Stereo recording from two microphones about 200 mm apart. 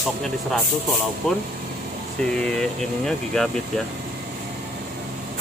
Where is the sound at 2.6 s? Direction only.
Centre (ahead or behind).